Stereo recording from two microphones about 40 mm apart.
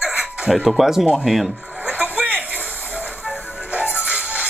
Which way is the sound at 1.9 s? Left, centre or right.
Right.